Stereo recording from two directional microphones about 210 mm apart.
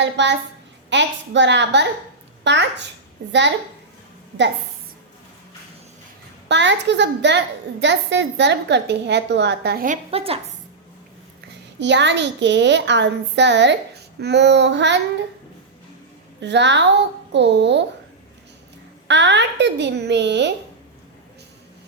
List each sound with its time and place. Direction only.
0.0 s a woman's voice: 55° right (ahead or behind)
6.5 s a woman's voice: 60° right (ahead or behind); by 10.0 s 45° right (ahead or behind)
10.1 s a woman's voice: 25° right (ahead or behind)
11.8 s a woman's voice: 55° right (ahead or behind)
16.4 s a woman's voice: 55° right (ahead or behind)
19.0 s a woman's voice: 55° right (ahead or behind)